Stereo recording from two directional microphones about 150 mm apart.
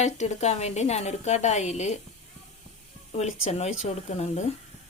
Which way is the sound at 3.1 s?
45° left (ahead or behind).